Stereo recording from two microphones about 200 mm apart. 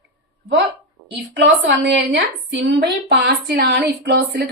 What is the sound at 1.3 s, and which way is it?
A woman's voice, 55° right (ahead or behind).